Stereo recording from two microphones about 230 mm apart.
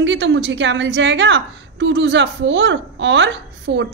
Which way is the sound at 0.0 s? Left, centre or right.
Right.